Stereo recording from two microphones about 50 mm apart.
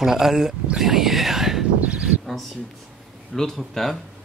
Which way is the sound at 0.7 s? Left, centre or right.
Centre.